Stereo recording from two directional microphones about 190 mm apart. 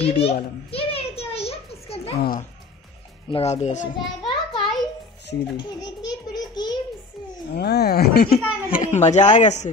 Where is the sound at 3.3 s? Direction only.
35° left (ahead or behind).